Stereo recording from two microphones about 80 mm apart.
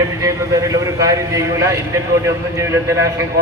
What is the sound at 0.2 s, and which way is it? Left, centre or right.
A man's voice, right.